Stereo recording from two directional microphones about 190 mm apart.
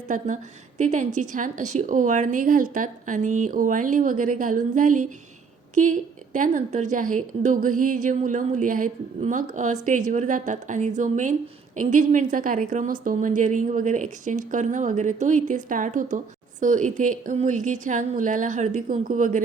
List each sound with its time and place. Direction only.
0.1 s a woman's voice: 45° right (ahead or behind)